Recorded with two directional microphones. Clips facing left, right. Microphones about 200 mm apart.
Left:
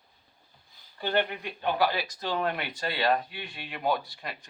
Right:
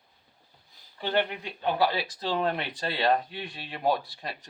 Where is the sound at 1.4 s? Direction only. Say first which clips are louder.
Right 1 dB; 30° right (ahead or behind).